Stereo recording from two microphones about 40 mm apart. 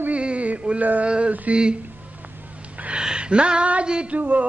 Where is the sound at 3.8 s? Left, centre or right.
Right.